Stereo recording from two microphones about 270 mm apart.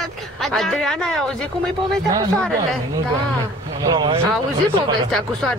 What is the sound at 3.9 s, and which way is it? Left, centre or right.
Music, centre.